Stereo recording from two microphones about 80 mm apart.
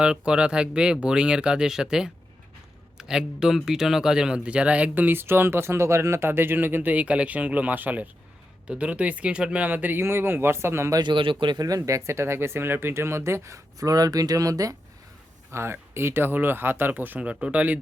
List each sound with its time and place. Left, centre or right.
0.0 s speech: centre; by 10.9 s right
11.0 s a man's voice: right
11.5 s speech: right
11.9 s speech: right
15.5 s speech: right; by 17.7 s centre